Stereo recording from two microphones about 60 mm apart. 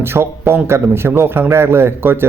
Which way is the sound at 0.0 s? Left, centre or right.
Right.